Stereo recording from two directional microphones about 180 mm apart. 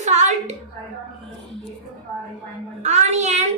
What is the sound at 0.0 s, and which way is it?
Hands, 40° right (ahead or behind).